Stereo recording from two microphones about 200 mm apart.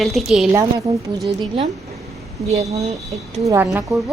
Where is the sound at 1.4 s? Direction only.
25° right (ahead or behind).